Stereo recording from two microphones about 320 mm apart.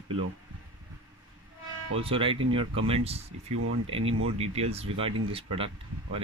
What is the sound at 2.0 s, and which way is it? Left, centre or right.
Speech, centre.